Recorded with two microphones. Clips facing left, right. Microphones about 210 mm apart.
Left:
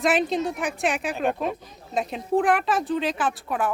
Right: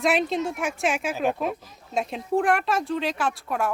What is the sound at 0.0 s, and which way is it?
Speech, centre (ahead or behind).